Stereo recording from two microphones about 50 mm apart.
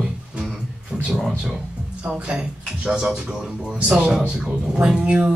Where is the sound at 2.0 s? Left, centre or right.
Right.